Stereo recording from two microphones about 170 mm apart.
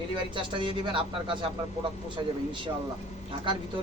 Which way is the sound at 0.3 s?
30° right (ahead or behind).